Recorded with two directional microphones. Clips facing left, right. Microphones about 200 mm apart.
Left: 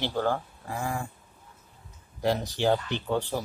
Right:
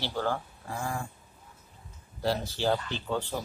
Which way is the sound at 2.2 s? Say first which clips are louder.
Left 3 dB; 15° left (ahead or behind).